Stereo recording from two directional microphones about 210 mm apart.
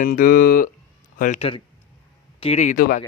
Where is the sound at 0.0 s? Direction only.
40° left (ahead or behind).